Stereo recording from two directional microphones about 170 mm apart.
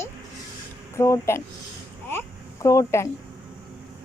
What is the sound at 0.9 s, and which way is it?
Speech, 15° left (ahead or behind).